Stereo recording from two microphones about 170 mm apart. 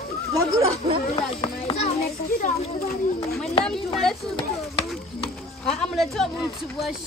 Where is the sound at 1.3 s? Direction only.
35° left (ahead or behind).